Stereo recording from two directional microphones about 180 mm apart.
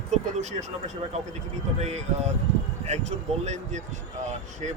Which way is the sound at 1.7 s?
40° right (ahead or behind).